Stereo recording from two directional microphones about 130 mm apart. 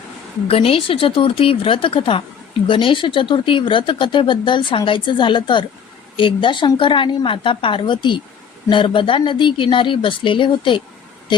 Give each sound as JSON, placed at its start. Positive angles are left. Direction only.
{"t": 0.4, "sound": "speech", "side_deg": 45}